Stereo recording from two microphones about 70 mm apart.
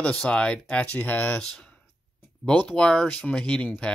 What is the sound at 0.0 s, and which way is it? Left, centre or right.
Speech, centre.